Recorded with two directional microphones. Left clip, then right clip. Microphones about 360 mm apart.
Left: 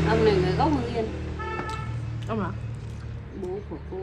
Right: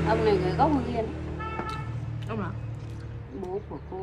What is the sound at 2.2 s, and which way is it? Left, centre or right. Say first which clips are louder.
Speech: left 4 dB; centre.